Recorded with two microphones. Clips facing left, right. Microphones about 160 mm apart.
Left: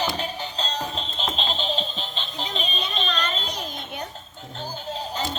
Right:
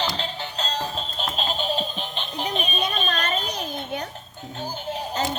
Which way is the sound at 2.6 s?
55° right (ahead or behind).